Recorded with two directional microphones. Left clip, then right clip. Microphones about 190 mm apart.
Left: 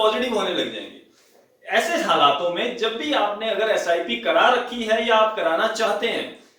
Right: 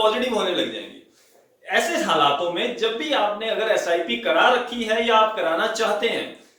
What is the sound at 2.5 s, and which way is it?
Speech, 15° right (ahead or behind).